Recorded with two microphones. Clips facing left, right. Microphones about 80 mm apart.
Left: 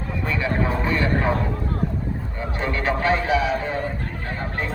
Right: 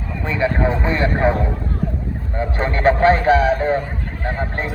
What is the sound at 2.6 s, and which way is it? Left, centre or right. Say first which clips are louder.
Speech: right 8 dB; right.